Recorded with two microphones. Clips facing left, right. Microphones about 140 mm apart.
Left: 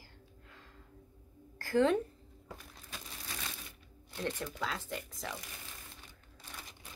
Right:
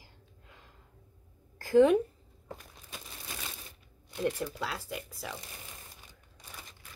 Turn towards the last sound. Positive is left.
turn(degrees=-5)  # may be behind; listen again after turning